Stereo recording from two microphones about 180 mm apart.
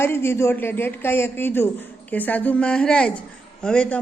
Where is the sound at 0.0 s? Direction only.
15° left (ahead or behind).